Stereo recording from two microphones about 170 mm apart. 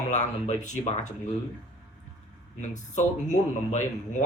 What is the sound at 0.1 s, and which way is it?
Speech, 45° left (ahead or behind).